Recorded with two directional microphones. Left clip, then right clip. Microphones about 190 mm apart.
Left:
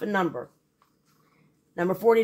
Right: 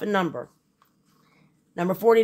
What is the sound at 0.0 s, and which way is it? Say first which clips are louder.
Speech: right 2 dB; 55° right (ahead or behind).